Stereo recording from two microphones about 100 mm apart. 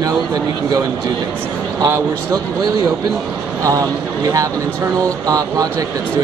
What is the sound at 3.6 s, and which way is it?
Speech, 35° right (ahead or behind).